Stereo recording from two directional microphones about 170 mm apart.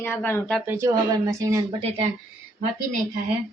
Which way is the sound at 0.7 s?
15° right (ahead or behind).